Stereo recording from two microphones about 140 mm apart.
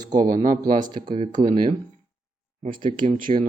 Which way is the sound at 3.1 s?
45° right (ahead or behind).